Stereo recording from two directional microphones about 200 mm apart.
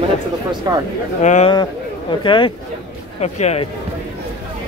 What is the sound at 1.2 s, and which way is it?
Speech, 35° left (ahead or behind).